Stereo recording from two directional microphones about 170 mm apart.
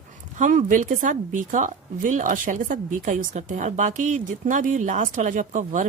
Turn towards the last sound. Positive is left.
turn(degrees=-50)  # may be behind; listen again after turning